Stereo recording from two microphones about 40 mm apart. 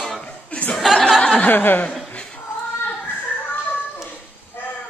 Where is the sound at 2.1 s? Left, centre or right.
Left.